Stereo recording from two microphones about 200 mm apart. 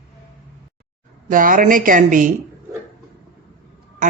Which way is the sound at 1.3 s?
45° right (ahead or behind).